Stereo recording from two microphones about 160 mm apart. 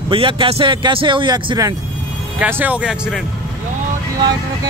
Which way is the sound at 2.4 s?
10° right (ahead or behind).